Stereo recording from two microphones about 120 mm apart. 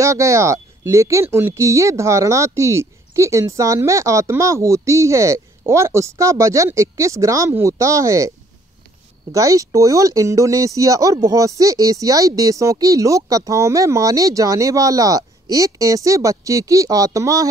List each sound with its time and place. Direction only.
0.0 s speech: 25° right (ahead or behind)
9.3 s speech: 30° right (ahead or behind)